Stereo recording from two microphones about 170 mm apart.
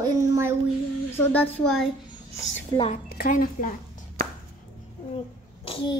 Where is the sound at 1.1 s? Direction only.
10° left (ahead or behind).